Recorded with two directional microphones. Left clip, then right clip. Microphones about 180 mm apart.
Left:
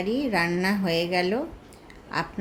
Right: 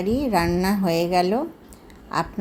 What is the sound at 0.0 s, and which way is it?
A woman's voice, 15° right (ahead or behind).